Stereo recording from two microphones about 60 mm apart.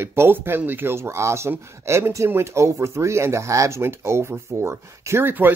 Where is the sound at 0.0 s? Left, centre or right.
Right.